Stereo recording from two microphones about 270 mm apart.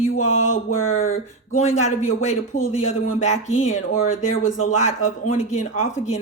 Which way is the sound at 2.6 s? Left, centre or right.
Left.